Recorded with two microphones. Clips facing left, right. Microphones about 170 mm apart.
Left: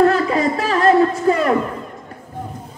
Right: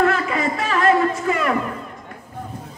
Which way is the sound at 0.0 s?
35° left (ahead or behind).